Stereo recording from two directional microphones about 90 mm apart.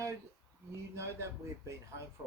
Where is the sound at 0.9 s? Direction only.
30° right (ahead or behind).